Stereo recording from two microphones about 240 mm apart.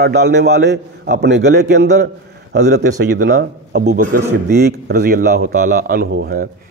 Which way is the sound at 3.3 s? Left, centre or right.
Right.